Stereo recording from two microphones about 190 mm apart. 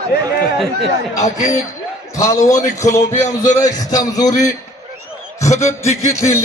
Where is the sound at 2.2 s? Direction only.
15° left (ahead or behind).